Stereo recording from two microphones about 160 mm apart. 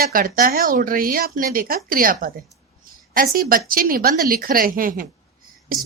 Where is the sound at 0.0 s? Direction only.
65° right (ahead or behind).